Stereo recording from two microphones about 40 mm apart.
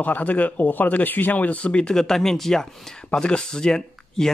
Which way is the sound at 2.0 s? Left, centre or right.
Centre.